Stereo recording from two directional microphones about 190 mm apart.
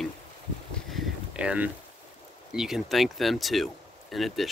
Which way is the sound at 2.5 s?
Centre (ahead or behind).